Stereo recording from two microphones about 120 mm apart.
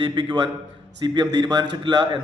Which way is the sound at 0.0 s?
45° right (ahead or behind).